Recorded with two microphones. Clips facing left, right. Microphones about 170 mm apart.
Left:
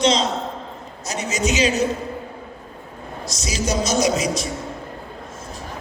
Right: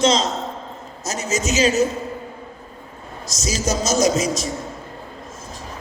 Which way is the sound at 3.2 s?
45° right (ahead or behind).